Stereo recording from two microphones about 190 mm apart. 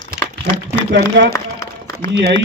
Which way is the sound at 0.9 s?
65° right (ahead or behind).